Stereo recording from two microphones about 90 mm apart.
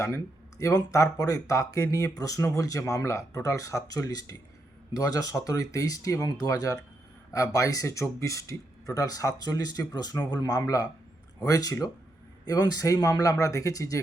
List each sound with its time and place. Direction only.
0.6 s a man's voice: 40° left (ahead or behind)